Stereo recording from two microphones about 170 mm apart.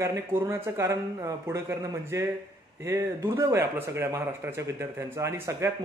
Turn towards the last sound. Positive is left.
turn(degrees=-15)  # may be behind; listen again after turning